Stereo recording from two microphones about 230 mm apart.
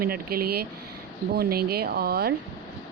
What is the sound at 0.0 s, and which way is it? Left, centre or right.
Speech, right.